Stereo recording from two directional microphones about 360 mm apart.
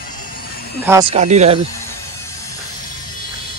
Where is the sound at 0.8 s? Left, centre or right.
Centre.